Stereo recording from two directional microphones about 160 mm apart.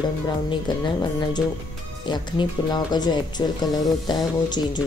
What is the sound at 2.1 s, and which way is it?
Speech, 25° left (ahead or behind).